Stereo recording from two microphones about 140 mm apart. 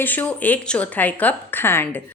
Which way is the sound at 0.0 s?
15° left (ahead or behind).